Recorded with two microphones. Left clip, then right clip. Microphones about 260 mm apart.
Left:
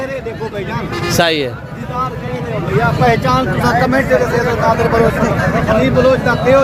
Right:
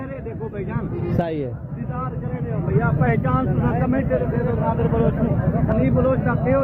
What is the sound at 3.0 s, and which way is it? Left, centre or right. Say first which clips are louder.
Speech: left 10 dB; centre.